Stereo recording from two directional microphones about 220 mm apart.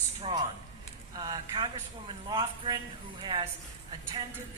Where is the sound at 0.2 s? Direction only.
20° right (ahead or behind).